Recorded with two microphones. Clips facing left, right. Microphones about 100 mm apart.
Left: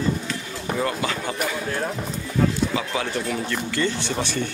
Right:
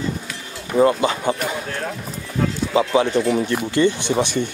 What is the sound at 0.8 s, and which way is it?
Speech, 25° right (ahead or behind).